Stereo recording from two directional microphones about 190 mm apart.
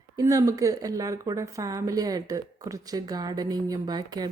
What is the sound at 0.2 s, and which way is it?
A woman's voice, 15° right (ahead or behind).